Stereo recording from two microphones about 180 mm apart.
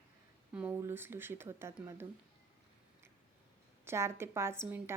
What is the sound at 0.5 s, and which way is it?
A woman's voice, 10° right (ahead or behind).